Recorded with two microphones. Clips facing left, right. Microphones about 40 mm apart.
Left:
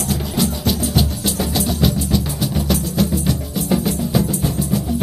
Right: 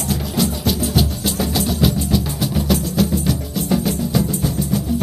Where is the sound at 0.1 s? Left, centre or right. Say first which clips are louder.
Right 1 dB; centre.